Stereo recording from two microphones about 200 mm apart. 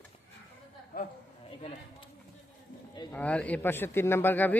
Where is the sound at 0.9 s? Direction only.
45° left (ahead or behind).